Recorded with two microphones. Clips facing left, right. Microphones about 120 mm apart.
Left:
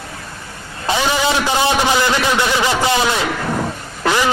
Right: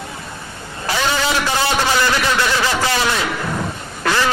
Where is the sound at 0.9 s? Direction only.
15° left (ahead or behind).